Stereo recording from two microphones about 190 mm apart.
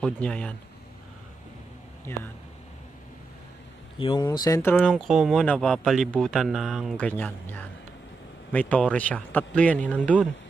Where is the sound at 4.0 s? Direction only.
30° left (ahead or behind).